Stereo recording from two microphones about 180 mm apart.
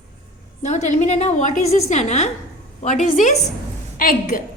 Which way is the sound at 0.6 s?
40° left (ahead or behind).